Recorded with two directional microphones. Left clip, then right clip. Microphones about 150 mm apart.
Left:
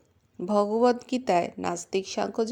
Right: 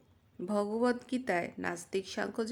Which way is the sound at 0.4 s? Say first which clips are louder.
Left 9 dB; 25° left (ahead or behind).